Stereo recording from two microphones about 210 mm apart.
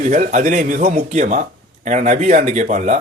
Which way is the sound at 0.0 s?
35° right (ahead or behind).